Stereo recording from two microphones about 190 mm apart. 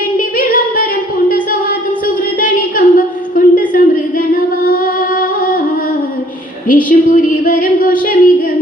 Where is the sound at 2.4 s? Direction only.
45° left (ahead or behind).